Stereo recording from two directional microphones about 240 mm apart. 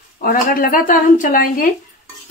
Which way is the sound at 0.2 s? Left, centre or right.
Left.